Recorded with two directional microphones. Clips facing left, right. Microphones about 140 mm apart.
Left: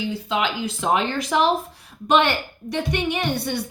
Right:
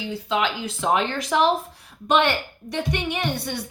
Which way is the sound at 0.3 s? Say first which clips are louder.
Right 2 dB; 15° left (ahead or behind).